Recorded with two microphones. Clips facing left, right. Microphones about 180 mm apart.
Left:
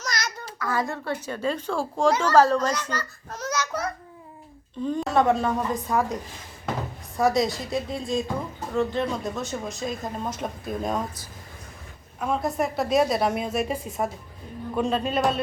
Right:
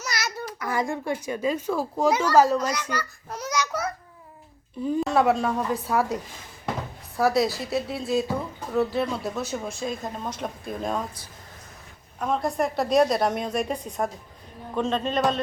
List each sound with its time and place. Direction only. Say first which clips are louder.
0.0 s a sound: even; 10° right (ahead or behind)
0.6 s a woman's voice: even; 15° right (ahead or behind)
4.9 s a woman's voice: even; 5° right (ahead or behind)
7.2 s a woman's voice: even; centre (ahead or behind)
12.2 s a woman's voice: even; centre (ahead or behind)